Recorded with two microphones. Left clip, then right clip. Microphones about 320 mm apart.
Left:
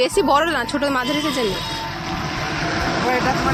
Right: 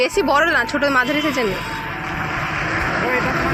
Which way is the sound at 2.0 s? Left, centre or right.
Left.